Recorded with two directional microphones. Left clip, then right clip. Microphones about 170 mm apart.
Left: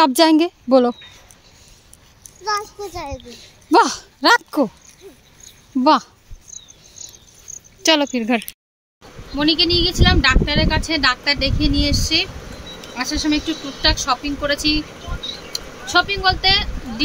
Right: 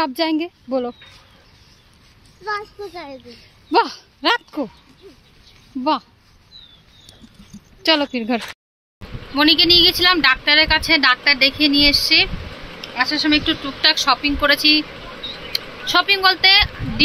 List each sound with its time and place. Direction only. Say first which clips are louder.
0.0 s speech: left 7 dB; 45° left (ahead or behind)
2.4 s a child's voice: left 3 dB; 25° left (ahead or behind)
3.7 s speech: left 3 dB; 40° left (ahead or behind)
5.8 s speech: left 6 dB; 40° left (ahead or behind)
7.8 s speech: left 1 dB; 20° left (ahead or behind)
9.3 s speech: right 4 dB; 5° right (ahead or behind)
12.8 s speech: right 4 dB; 15° left (ahead or behind)
13.7 s speech: right 2 dB; centre (ahead or behind)